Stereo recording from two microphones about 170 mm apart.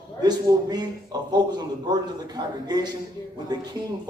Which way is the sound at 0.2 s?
25° right (ahead or behind).